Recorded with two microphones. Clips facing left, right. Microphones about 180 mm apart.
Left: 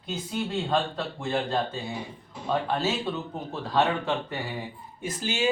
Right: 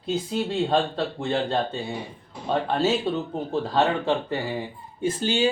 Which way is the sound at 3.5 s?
30° right (ahead or behind).